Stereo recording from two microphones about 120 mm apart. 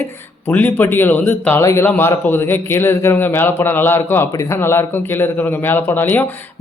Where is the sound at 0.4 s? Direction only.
15° left (ahead or behind).